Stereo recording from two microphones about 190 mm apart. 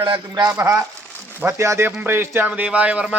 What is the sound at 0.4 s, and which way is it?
Speech, 10° right (ahead or behind).